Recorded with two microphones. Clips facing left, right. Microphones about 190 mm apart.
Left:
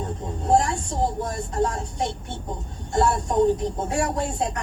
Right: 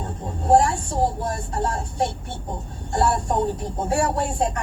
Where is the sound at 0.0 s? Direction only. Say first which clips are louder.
Left 1 dB; 50° right (ahead or behind).